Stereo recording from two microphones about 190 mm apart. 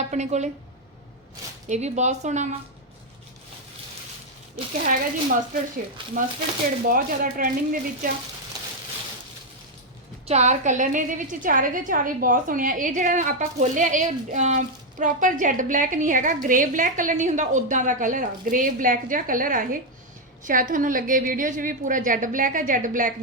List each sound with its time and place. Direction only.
0.1 s speech: 35° right (ahead or behind)
1.6 s speech: 40° right (ahead or behind)
4.9 s a woman's voice: 45° right (ahead or behind)
10.2 s a woman's voice: 35° right (ahead or behind)